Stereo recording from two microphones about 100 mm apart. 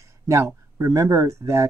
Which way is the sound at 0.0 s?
30° right (ahead or behind).